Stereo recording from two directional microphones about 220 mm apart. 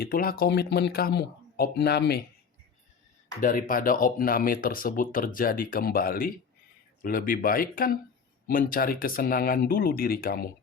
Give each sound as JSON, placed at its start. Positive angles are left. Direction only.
{"t": 0.0, "sound": "speech", "side_deg": 40}
{"t": 3.4, "sound": "speech", "side_deg": 40}